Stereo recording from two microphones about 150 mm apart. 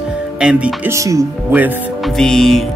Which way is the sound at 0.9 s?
20° right (ahead or behind).